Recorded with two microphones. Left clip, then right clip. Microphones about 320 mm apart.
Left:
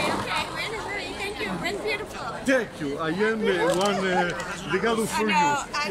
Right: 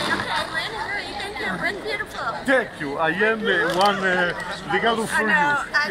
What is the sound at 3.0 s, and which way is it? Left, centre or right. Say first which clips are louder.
Speech: right 4 dB; centre.